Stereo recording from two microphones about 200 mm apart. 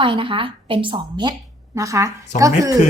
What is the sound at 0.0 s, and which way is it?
A woman's voice, 25° right (ahead or behind).